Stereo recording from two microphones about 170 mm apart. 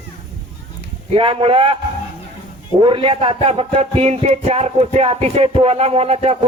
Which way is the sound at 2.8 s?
30° right (ahead or behind).